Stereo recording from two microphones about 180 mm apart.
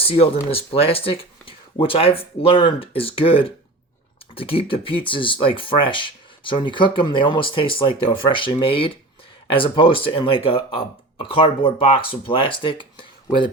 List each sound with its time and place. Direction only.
0.0 s speech: 30° left (ahead or behind)